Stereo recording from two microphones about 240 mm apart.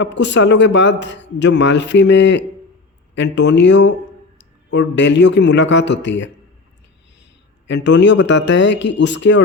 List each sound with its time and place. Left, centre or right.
0.0 s a man's voice: left
7.7 s a man's voice: left